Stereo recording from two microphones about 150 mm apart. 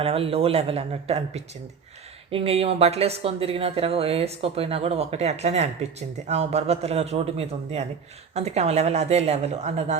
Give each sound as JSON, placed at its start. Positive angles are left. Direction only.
{"t": 0.0, "sound": "speech", "side_deg": -40}